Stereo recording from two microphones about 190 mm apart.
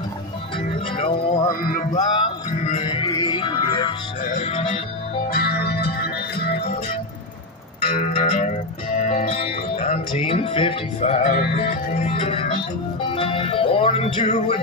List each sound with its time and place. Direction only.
0.6 s music: 30° left (ahead or behind); by 2.0 s 45° left (ahead or behind)
2.1 s music: 25° left (ahead or behind)
5.3 s music: 55° left (ahead or behind)
7.9 s music: 35° left (ahead or behind)